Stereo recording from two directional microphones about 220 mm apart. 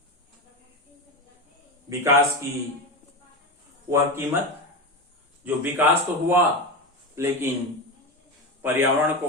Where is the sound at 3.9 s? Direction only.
10° right (ahead or behind).